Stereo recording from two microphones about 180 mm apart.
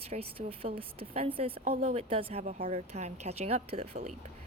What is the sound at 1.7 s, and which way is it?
Speech, 50° right (ahead or behind).